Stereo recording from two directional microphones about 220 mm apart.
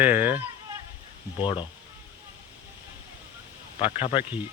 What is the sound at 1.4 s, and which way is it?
Speech, 20° left (ahead or behind).